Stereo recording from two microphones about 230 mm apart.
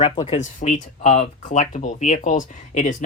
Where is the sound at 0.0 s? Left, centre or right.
Left.